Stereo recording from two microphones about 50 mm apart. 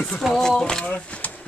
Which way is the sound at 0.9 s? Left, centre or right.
Left.